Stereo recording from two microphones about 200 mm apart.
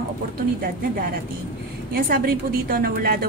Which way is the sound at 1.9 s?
45° right (ahead or behind).